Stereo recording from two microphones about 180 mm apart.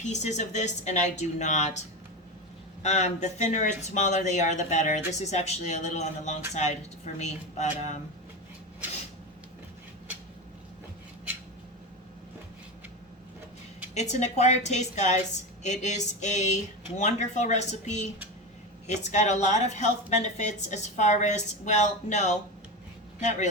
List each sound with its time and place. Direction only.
0.0 s speech: 40° left (ahead or behind)
2.8 s speech: 40° left (ahead or behind)
13.9 s speech: 40° left (ahead or behind)